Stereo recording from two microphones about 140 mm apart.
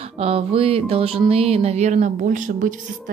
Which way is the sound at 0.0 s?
45° right (ahead or behind).